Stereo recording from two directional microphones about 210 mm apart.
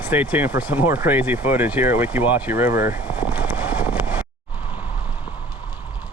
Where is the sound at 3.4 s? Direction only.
10° right (ahead or behind).